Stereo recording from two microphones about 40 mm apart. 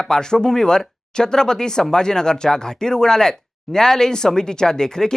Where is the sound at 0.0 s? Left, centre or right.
Centre.